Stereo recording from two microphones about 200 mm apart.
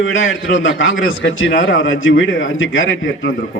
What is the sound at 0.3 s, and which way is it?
A man's voice, 65° left (ahead or behind).